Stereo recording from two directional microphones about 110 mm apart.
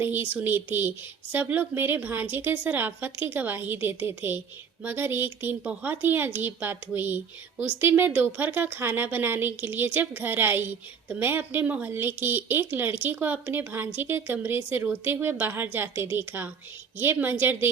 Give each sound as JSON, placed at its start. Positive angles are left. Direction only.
{"t": 0.0, "sound": "speech", "side_deg": -20}